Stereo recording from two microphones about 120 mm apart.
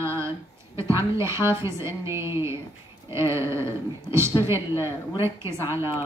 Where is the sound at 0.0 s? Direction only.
20° right (ahead or behind).